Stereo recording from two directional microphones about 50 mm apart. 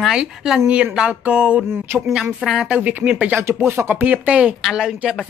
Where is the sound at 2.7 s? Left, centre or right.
Right.